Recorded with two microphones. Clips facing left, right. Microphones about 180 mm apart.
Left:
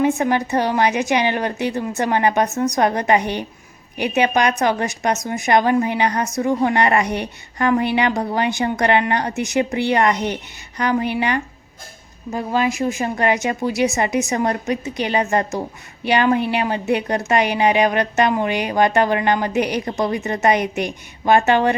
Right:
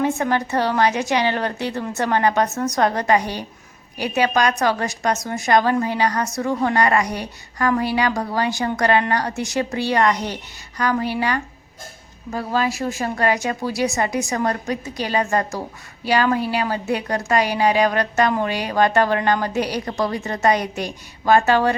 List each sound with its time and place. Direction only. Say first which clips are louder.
0.0 s a woman's voice: left 3 dB; 15° left (ahead or behind)